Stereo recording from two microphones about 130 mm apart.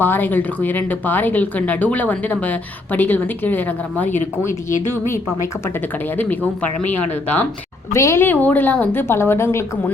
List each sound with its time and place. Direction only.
0.0 s speech: 15° left (ahead or behind)
5.6 s speech: 15° left (ahead or behind)
7.9 s speech: 20° left (ahead or behind)